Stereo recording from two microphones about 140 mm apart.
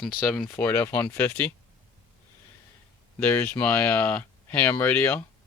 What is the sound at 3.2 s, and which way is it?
Speech, 15° left (ahead or behind).